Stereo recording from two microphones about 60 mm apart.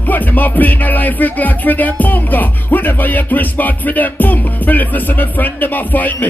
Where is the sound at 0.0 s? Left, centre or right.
Left.